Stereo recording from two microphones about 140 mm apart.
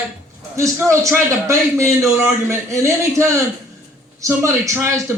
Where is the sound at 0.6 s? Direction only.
20° right (ahead or behind).